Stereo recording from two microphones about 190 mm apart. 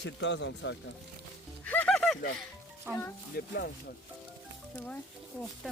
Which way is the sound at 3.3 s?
60° left (ahead or behind).